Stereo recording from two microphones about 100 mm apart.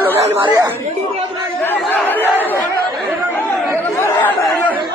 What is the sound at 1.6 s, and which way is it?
Chatter, 20° left (ahead or behind).